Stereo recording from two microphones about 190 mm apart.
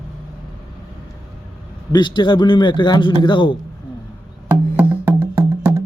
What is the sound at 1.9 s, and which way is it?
A man's voice, 25° left (ahead or behind).